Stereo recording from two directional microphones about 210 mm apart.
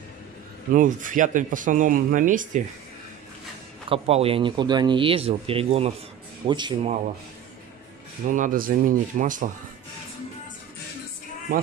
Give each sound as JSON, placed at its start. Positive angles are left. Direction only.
{"t": 0.7, "sound": "speech", "side_deg": -40}
{"t": 3.9, "sound": "speech", "side_deg": -25}
{"t": 8.3, "sound": "speech", "side_deg": -40}